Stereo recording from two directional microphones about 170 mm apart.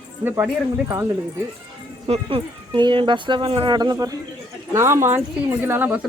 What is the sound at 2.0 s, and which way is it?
Speech, 30° right (ahead or behind).